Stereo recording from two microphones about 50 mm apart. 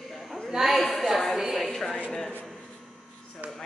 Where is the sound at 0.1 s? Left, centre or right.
Centre.